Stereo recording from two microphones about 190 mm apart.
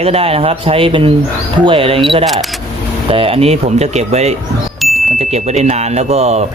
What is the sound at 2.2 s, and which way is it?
Speech, centre (ahead or behind).